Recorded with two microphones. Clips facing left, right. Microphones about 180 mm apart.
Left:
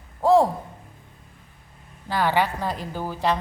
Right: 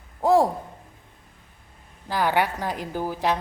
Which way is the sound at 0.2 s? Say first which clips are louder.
Left 1 dB; 15° right (ahead or behind).